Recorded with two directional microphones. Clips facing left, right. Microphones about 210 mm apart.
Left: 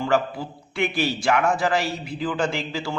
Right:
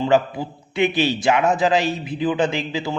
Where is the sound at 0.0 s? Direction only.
20° right (ahead or behind).